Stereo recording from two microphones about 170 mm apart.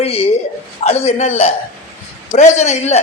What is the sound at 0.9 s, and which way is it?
A man's voice, 40° left (ahead or behind).